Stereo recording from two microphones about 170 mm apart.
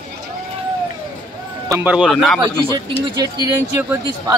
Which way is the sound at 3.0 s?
25° right (ahead or behind).